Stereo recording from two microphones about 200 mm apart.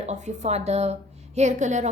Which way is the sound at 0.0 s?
35° right (ahead or behind).